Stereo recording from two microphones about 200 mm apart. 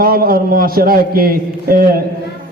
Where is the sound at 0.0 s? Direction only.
45° right (ahead or behind).